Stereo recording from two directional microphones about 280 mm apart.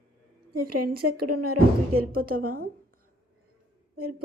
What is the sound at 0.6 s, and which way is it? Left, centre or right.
Speech, right.